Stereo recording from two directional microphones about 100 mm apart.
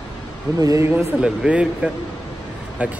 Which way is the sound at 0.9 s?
10° right (ahead or behind).